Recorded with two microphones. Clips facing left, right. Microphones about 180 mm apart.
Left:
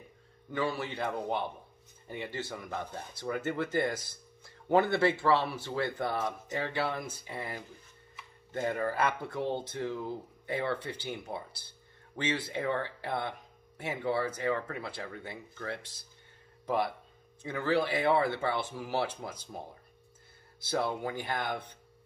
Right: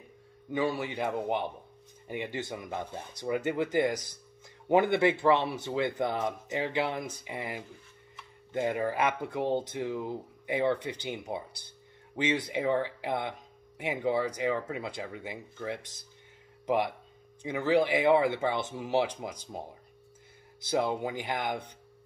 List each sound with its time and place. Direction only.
0.5 s speech: 15° right (ahead or behind)
20.6 s speech: 15° right (ahead or behind)